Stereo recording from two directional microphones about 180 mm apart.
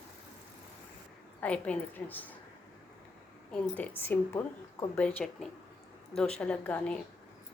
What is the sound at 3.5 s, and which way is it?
Speech, 10° left (ahead or behind).